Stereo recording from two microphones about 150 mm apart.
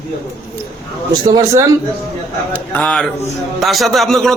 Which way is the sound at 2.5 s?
10° left (ahead or behind).